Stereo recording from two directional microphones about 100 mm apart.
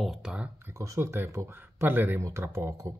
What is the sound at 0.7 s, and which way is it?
Speech, 30° right (ahead or behind).